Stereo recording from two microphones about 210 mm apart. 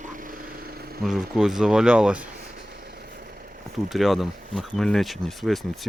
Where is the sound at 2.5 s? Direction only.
50° right (ahead or behind).